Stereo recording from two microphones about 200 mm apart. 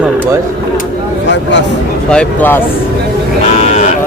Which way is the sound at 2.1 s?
5° left (ahead or behind).